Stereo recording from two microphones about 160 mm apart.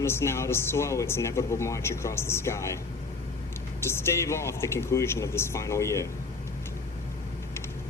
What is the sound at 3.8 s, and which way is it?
Speech, 15° left (ahead or behind).